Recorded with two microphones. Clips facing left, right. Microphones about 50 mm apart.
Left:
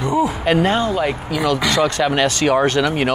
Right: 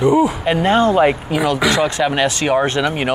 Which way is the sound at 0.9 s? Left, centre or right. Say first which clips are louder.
Right 6 dB; right.